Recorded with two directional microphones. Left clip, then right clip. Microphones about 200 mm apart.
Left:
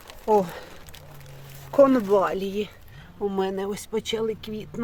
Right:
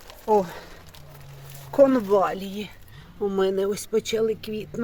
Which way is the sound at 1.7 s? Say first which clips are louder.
Even; 15° left (ahead or behind).